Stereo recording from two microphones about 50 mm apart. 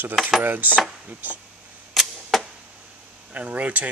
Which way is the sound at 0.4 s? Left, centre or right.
Right.